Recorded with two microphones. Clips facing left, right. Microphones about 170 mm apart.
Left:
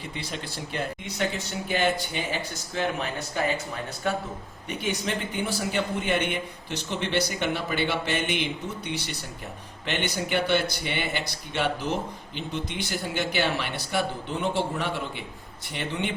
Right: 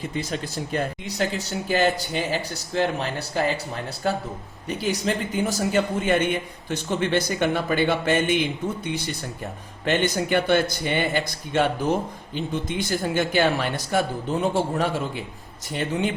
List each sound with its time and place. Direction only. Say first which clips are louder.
0.1 s speech: right 6 dB; 45° right (ahead or behind)
4.7 s speech: right 4 dB; 35° right (ahead or behind)